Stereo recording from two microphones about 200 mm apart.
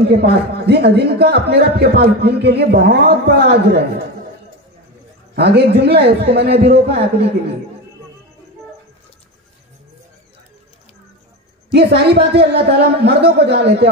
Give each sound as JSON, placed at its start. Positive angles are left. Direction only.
{"t": 0.1, "sound": "a man's voice", "side_deg": -55}
{"t": 5.3, "sound": "a man's voice", "side_deg": -55}
{"t": 11.7, "sound": "a man's voice", "side_deg": -55}